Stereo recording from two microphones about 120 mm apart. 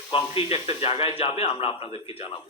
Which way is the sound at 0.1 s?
45° left (ahead or behind).